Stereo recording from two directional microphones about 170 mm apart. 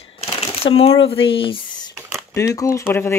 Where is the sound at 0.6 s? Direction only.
90° left.